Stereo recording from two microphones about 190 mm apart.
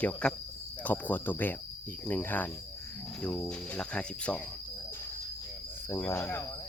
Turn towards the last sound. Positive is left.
turn(degrees=10)  # may be behind; listen again after turning